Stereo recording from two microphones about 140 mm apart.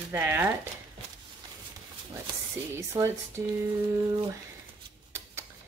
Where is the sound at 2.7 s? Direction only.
20° right (ahead or behind).